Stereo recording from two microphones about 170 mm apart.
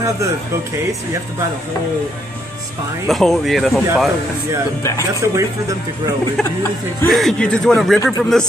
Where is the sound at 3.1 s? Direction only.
Centre (ahead or behind).